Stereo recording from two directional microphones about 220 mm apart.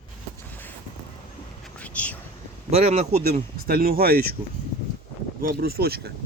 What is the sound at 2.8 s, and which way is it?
Speech, 30° right (ahead or behind).